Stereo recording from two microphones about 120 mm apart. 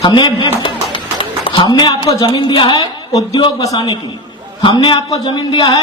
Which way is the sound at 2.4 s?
45° left (ahead or behind).